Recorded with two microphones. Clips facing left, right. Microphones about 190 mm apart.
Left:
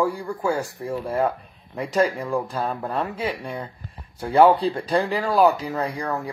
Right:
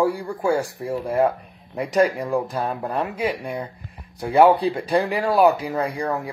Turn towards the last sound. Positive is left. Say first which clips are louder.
# right 2 dB
turn(degrees=-10)  # may be behind; listen again after turning